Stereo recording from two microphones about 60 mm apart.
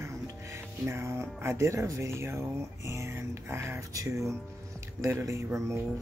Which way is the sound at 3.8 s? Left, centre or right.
Right.